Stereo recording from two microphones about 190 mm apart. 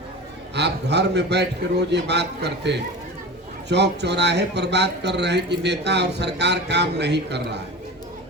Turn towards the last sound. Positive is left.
turn(degrees=-65)  # may be behind; listen again after turning